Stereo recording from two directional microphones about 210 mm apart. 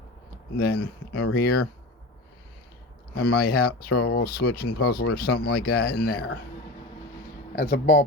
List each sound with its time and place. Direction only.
0.6 s speech: 50° left (ahead or behind)
3.2 s speech: 50° left (ahead or behind)
7.5 s speech: 45° left (ahead or behind)